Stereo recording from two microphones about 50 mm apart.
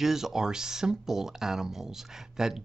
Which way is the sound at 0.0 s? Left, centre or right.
Centre.